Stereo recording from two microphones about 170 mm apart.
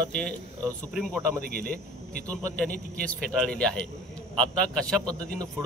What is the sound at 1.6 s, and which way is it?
Speech, 60° right (ahead or behind).